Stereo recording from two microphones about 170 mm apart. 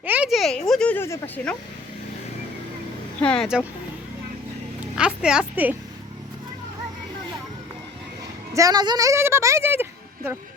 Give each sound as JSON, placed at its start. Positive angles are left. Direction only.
{"t": 0.0, "sound": "speech", "side_deg": -10}
{"t": 3.2, "sound": "speech", "side_deg": 5}
{"t": 4.9, "sound": "a woman's voice", "side_deg": -5}
{"t": 8.5, "sound": "a woman's voice", "side_deg": -20}